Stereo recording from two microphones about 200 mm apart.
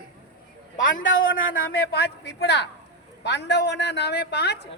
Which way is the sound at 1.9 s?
55° left (ahead or behind).